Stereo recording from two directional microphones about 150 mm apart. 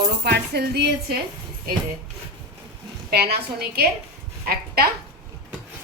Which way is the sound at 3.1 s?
90° right.